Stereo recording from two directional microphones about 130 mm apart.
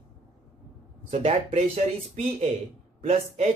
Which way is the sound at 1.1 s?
60° right (ahead or behind).